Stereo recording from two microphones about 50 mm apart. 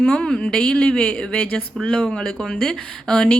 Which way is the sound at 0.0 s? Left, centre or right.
Centre.